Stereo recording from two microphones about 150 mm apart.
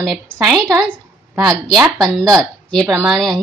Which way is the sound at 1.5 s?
25° right (ahead or behind).